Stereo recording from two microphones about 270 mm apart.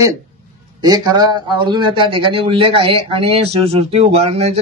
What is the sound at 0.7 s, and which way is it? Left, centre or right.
A man's voice, centre.